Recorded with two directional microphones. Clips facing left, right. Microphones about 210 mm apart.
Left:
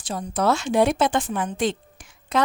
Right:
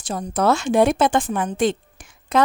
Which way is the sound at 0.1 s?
45° right (ahead or behind).